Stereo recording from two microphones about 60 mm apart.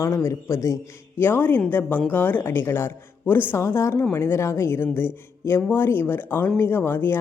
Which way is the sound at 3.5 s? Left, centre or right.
Left.